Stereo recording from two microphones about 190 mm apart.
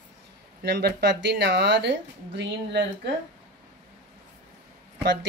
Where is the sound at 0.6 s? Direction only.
60° right (ahead or behind).